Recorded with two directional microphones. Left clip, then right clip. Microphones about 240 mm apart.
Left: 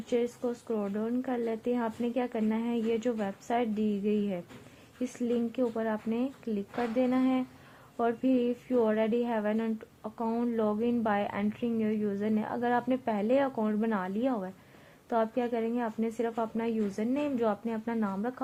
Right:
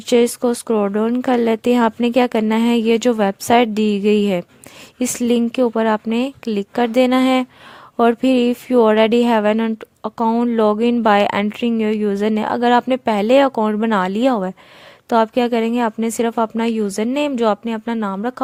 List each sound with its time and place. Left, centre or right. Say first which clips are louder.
0.1 s speech: right 16 dB; right